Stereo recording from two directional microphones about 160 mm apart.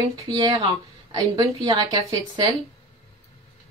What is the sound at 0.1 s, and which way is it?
A woman's voice, 25° right (ahead or behind).